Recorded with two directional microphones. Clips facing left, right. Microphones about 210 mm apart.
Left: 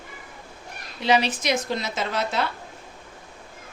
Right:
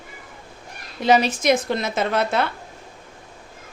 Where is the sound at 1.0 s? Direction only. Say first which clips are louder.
Right 4 dB; 45° right (ahead or behind).